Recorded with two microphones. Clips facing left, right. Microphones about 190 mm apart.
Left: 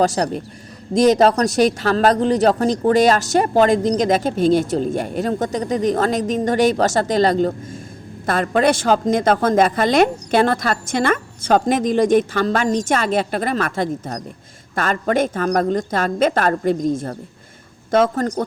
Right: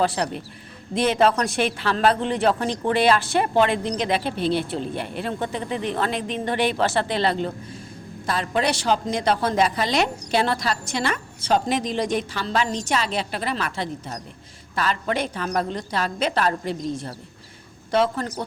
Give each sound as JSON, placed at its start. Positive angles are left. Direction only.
{"t": 0.0, "sound": "a woman's voice", "side_deg": 40}